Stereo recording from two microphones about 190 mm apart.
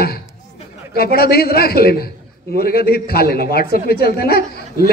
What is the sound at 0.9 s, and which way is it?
A man's voice, 55° left (ahead or behind).